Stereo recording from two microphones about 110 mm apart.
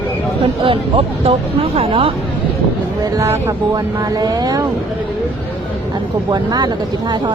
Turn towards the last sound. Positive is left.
turn(degrees=-40)  # may be behind; listen again after turning